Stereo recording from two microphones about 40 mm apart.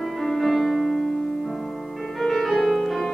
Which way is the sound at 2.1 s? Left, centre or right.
Centre.